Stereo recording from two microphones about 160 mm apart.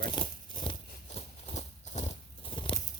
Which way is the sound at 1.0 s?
45° left (ahead or behind).